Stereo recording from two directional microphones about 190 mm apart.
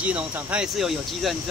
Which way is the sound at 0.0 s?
5° right (ahead or behind).